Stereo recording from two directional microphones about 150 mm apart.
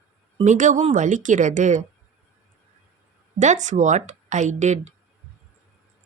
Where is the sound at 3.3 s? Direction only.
50° right (ahead or behind).